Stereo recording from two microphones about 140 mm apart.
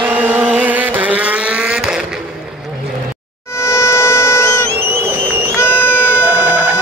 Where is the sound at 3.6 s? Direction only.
20° left (ahead or behind).